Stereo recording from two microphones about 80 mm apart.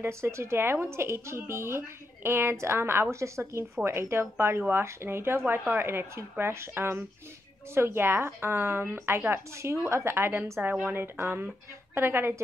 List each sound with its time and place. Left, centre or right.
0.0 s a woman's voice: right